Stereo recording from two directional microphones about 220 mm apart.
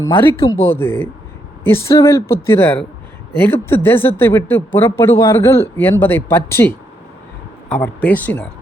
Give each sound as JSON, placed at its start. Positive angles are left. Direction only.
{"t": 0.0, "sound": "speech", "side_deg": 10}